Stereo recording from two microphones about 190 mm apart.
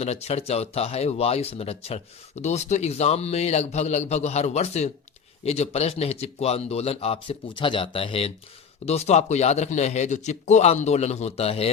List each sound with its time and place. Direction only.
0.0 s speech: 35° left (ahead or behind)